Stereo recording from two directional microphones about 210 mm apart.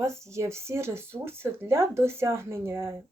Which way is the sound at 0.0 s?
15° right (ahead or behind).